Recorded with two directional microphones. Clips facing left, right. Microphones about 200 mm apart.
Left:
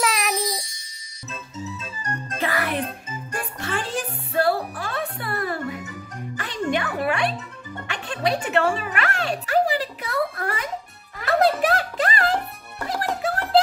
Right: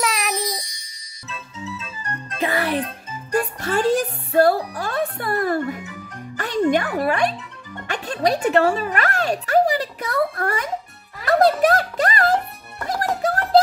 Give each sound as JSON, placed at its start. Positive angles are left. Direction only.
{"t": 0.0, "sound": "music", "side_deg": 0}
{"t": 2.4, "sound": "music", "side_deg": -25}
{"t": 3.3, "sound": "music", "side_deg": -40}
{"t": 6.7, "sound": "a sound", "side_deg": -40}
{"t": 7.8, "sound": "music", "side_deg": -40}